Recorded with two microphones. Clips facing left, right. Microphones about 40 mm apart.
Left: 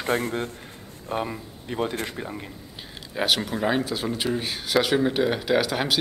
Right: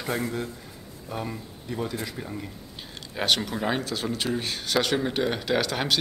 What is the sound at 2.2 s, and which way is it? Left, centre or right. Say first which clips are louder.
Speech: left 2 dB; left.